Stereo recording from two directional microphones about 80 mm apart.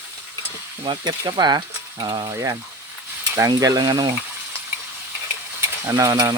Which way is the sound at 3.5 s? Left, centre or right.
Right.